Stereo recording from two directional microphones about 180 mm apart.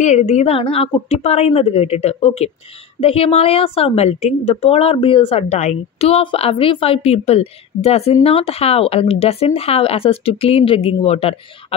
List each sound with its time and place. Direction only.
0.0 s a woman's voice: 40° left (ahead or behind)